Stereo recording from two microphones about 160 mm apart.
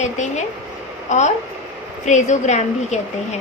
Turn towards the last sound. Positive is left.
turn(degrees=50)  # may be behind; listen again after turning